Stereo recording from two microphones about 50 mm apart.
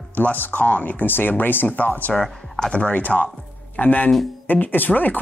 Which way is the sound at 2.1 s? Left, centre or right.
Centre.